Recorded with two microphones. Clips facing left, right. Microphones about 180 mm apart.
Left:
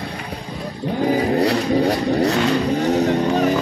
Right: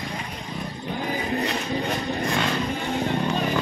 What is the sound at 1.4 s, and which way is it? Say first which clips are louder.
Vehicle: left 9 dB; 70° left (ahead or behind).